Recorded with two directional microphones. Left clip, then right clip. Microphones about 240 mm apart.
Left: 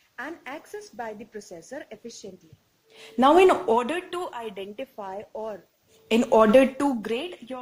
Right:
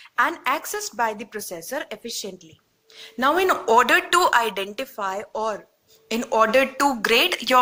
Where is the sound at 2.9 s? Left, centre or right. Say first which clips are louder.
Left 3 dB; centre.